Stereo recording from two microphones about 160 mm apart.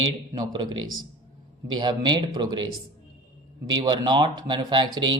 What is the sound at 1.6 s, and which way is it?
Speech, 25° right (ahead or behind).